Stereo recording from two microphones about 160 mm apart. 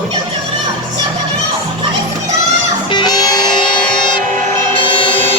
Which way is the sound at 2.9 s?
25° left (ahead or behind).